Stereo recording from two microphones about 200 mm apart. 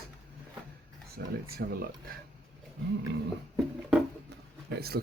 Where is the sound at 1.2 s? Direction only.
55° right (ahead or behind).